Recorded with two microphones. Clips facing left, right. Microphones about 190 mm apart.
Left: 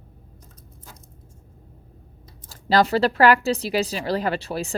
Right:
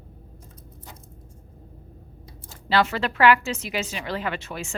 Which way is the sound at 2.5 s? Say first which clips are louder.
Left 4 dB; 40° left (ahead or behind).